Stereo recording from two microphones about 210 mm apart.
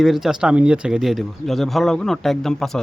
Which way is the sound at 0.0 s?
Centre (ahead or behind).